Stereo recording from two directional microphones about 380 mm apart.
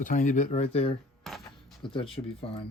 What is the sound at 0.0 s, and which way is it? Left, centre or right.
Speech, left.